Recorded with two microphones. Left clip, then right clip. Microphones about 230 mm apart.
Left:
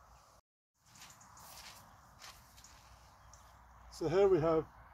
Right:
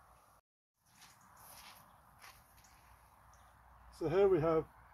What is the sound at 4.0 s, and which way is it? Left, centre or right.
Speech, centre.